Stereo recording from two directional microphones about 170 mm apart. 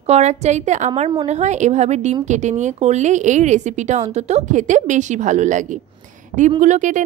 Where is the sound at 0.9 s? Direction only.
30° right (ahead or behind).